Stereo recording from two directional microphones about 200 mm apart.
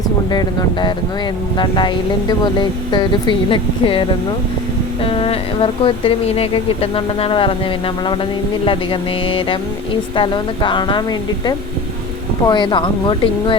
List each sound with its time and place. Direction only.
0.3 s speech: 20° left (ahead or behind)
5.0 s speech: 25° left (ahead or behind)
8.6 s speech: 25° left (ahead or behind)